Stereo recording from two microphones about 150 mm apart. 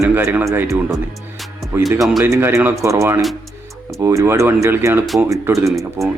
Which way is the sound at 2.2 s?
15° right (ahead or behind).